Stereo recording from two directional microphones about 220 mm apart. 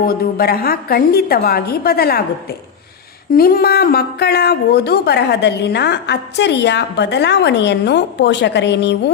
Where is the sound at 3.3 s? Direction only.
45° left (ahead or behind).